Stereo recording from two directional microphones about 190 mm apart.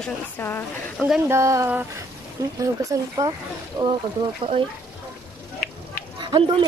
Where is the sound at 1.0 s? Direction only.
10° right (ahead or behind); by 4.6 s 25° right (ahead or behind).